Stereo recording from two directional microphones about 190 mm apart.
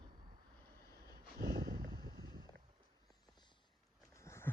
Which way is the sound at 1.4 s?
55° right (ahead or behind).